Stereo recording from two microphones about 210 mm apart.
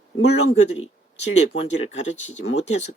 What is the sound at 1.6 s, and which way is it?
Speech, 30° left (ahead or behind).